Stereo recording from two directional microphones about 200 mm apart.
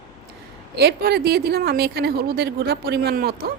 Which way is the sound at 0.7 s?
55° right (ahead or behind).